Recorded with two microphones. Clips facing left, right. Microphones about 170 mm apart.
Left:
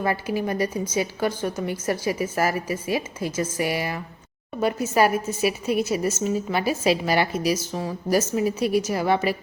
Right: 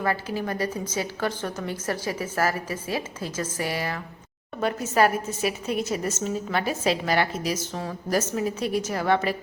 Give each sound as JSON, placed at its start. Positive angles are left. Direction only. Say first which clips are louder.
{"t": 0.0, "sound": "a woman's voice", "louder": "left 2 dB", "side_deg": 15}